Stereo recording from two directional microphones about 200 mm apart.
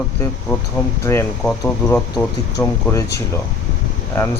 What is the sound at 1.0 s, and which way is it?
Speech, 10° left (ahead or behind).